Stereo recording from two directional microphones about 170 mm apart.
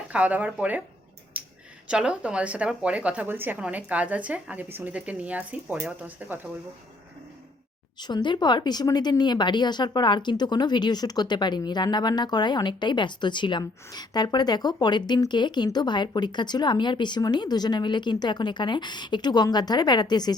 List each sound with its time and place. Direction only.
0.1 s a woman's voice: 10° right (ahead or behind)
1.3 s a sound: 10° right (ahead or behind)
1.9 s a woman's voice: 5° right (ahead or behind)
8.0 s speech: 25° left (ahead or behind)